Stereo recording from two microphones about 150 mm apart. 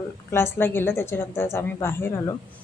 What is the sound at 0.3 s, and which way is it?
Speech, 15° left (ahead or behind).